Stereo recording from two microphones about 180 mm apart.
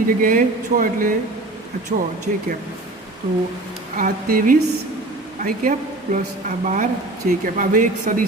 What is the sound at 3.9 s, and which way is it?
Speech, 50° right (ahead or behind).